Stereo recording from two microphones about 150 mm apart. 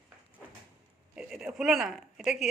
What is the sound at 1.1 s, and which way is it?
Speech, 5° right (ahead or behind).